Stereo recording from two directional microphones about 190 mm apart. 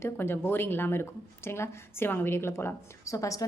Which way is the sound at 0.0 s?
10° left (ahead or behind).